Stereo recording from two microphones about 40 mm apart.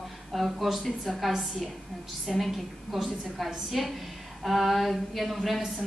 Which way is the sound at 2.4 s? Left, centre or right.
Centre.